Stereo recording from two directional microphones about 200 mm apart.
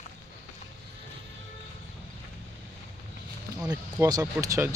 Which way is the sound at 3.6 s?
5° right (ahead or behind).